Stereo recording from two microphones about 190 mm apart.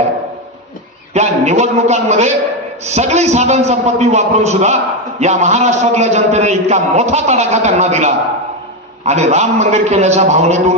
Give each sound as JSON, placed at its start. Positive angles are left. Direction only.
{"t": 1.1, "sound": "a man's voice", "side_deg": -35}